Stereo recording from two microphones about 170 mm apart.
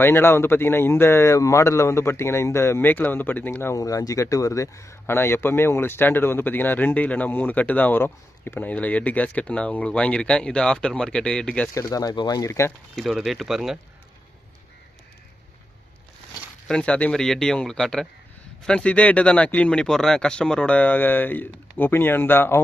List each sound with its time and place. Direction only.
0.0 s speech: 15° left (ahead or behind)
11.7 s speech: 20° left (ahead or behind)
12.9 s speech: centre (ahead or behind)
16.6 s speech: 5° left (ahead or behind)